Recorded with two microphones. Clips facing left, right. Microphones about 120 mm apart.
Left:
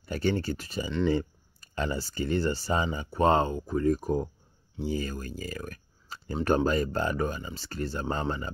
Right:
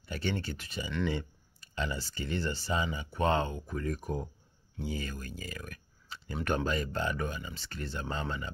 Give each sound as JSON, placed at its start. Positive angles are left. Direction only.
{"t": 0.0, "sound": "speech", "side_deg": 40}